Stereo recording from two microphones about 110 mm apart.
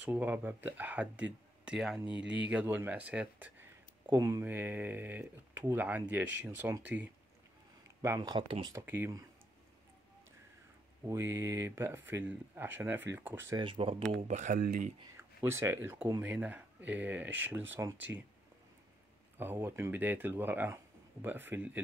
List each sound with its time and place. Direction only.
0.0 s speech: 15° right (ahead or behind)
4.0 s speech: 25° right (ahead or behind)
8.2 s speech: 40° right (ahead or behind)
8.7 s speech: 20° right (ahead or behind)
11.1 s speech: 20° right (ahead or behind)
13.6 s speech: 55° right (ahead or behind)
14.1 s speech: 90° right
15.1 s speech: 25° right (ahead or behind)
19.3 s speech: 20° right (ahead or behind)